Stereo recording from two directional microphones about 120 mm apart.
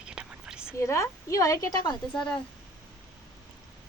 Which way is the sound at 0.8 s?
25° left (ahead or behind).